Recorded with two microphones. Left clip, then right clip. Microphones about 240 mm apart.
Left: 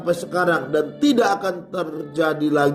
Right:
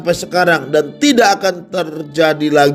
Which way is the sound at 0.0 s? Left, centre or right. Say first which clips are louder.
Right 7 dB; right.